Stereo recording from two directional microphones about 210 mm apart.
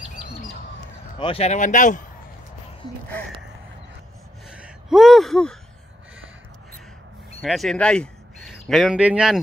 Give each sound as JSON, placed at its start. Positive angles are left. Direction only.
{"t": 1.2, "sound": "speech", "side_deg": 30}
{"t": 4.5, "sound": "a sound", "side_deg": -5}
{"t": 7.4, "sound": "a man's voice", "side_deg": 0}